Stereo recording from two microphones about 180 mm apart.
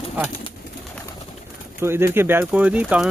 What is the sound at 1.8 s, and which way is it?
Speech, 15° right (ahead or behind).